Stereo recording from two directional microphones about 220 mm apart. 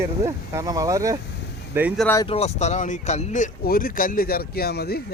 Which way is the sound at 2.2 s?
30° left (ahead or behind).